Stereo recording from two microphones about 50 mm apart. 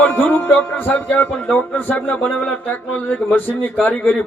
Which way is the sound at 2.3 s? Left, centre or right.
Left.